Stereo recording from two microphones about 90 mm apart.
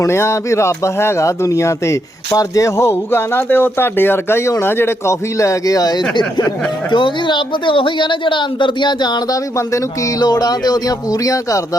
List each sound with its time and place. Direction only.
0.0 s speech: 30° left (ahead or behind)